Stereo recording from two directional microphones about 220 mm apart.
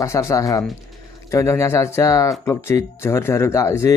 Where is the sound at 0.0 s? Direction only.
15° left (ahead or behind).